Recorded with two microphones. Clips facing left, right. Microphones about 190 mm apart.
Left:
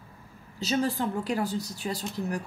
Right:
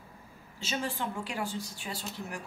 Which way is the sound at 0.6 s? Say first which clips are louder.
Left 7 dB; 40° left (ahead or behind).